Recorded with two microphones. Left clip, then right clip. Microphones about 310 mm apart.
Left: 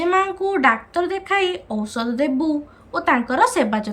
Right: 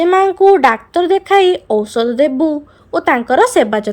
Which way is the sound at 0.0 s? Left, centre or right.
Centre.